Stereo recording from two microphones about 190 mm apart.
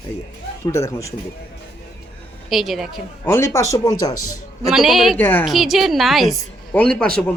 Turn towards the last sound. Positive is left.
turn(degrees=5)  # may be behind; listen again after turning